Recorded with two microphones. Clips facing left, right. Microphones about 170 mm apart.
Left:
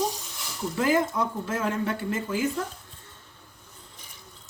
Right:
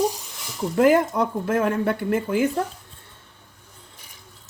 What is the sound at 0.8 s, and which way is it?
Speech, 60° right (ahead or behind).